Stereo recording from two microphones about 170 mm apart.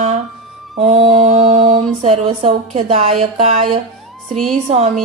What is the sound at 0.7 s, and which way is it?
Mantra, 40° right (ahead or behind).